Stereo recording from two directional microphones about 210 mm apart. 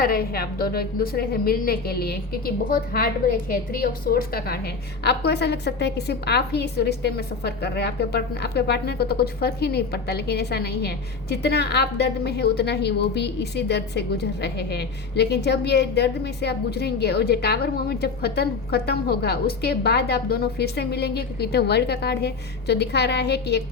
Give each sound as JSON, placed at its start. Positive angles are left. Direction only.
{"t": 0.0, "sound": "a woman's voice", "side_deg": 45}